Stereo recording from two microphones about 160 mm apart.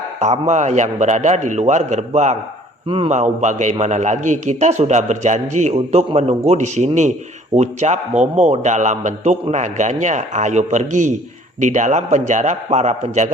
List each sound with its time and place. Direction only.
0.2 s a man's voice: 45° right (ahead or behind)
2.8 s a man's voice: 35° right (ahead or behind)